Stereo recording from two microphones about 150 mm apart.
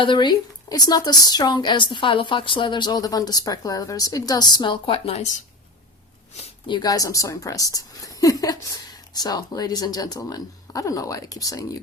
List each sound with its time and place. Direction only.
0.0 s speech: 30° left (ahead or behind)
6.7 s speech: 25° left (ahead or behind)